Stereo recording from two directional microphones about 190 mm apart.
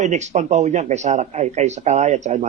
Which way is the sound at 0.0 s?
40° right (ahead or behind).